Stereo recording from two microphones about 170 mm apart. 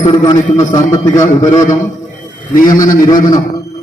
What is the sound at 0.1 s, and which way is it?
A man's voice, 25° left (ahead or behind).